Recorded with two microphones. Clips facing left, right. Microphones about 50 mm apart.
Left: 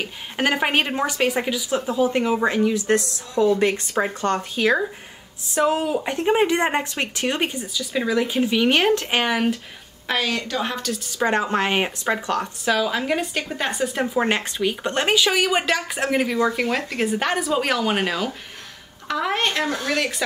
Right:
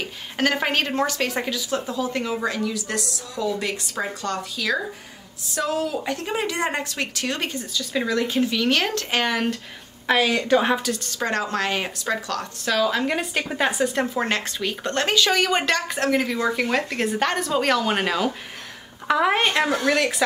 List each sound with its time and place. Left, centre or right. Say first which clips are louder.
0.4 s a woman's voice: left 2 dB; centre; by 4.8 s left
5.5 s a woman's voice: left 4 dB; left
10.0 s a woman's voice: right 4 dB; centre
10.5 s speech: right 7 dB; right
10.8 s a woman's voice: left 1 dB; centre
11.2 s a woman's voice: left 3 dB; left
12.6 s a woman's voice: right 1 dB; centre
14.2 s a woman's voice: left 3 dB; centre
19.0 s a woman's voice: right 3 dB; centre